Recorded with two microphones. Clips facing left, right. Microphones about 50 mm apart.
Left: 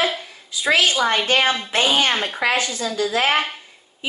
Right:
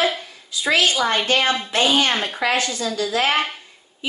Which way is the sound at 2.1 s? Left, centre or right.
Centre.